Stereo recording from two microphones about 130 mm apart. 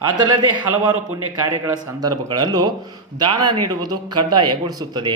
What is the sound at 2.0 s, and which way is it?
A man's voice, 30° right (ahead or behind).